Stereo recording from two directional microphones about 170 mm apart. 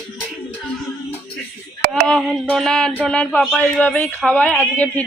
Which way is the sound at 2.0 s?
5° left (ahead or behind).